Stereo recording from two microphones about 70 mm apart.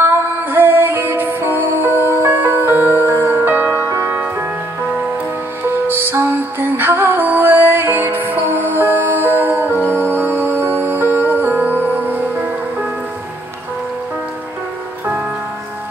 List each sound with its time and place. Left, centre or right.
0.0 s music: right
5.9 s music: right
7.2 s music: right